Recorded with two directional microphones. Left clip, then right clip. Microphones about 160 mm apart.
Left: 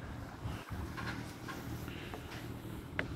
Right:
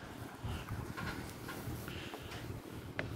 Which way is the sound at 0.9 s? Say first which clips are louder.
Left 1 dB; 50° right (ahead or behind).